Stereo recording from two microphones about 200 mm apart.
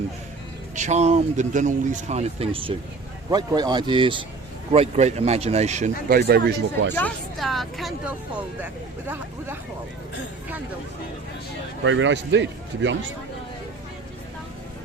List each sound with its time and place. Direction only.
0.8 s speech: 35° right (ahead or behind)
6.1 s speech: 55° right (ahead or behind)
6.9 s a woman's voice: 5° left (ahead or behind)
8.6 s speech: 10° right (ahead or behind)
11.9 s a man's voice: 70° right (ahead or behind)